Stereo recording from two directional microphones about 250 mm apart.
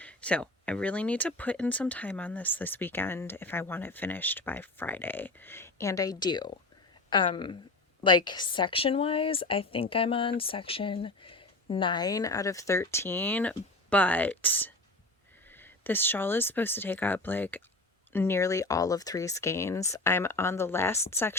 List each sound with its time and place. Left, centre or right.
0.0 s speech: centre